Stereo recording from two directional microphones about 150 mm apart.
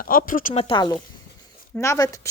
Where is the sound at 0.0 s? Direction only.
70° left (ahead or behind).